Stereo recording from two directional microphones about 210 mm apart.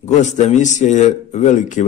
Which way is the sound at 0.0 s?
35° left (ahead or behind).